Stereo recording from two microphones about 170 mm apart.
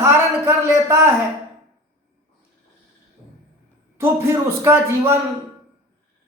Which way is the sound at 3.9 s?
15° right (ahead or behind).